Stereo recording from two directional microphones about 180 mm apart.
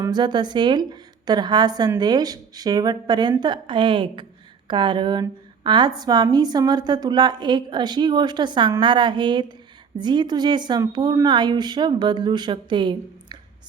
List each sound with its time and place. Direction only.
0.0 s a woman's voice: 25° right (ahead or behind)